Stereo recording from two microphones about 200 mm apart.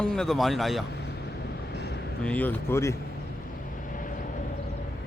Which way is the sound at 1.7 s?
55° left (ahead or behind).